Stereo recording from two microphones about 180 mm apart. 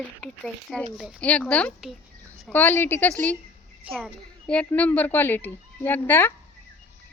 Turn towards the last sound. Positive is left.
turn(degrees=10)  # may be behind; listen again after turning